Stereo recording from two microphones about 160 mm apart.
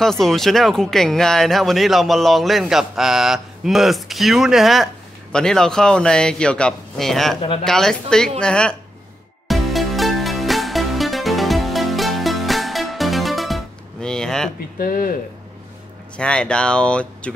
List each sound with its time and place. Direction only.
0.0 s speech: centre (ahead or behind)
9.5 s music: centre (ahead or behind)
14.8 s speech: 60° left (ahead or behind)
16.2 s speech: 5° left (ahead or behind)